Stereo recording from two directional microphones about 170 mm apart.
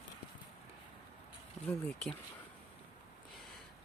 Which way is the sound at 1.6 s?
5° left (ahead or behind).